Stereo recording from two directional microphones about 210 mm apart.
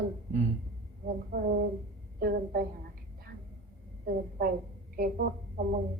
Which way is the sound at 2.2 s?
45° right (ahead or behind).